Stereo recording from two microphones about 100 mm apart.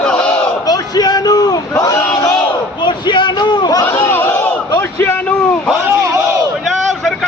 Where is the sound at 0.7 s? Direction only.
40° left (ahead or behind).